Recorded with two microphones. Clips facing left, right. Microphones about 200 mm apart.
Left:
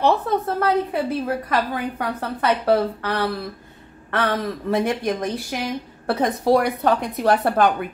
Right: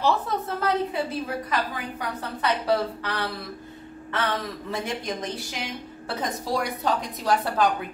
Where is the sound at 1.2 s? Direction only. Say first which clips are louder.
Left 5 dB; 55° left (ahead or behind).